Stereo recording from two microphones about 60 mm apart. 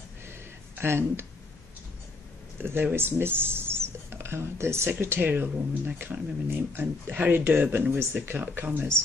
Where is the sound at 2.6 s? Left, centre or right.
Right.